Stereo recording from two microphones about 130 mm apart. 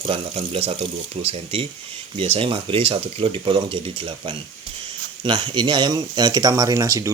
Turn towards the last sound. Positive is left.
turn(degrees=-25)  # may be behind; listen again after turning